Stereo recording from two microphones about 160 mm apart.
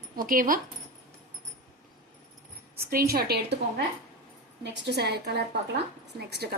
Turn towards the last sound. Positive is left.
turn(degrees=-85)